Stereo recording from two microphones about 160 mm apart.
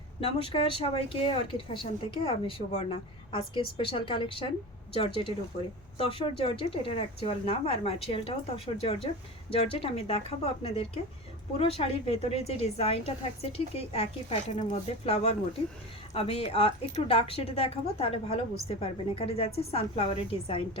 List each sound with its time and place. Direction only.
0.8 s a woman's voice: 35° left (ahead or behind)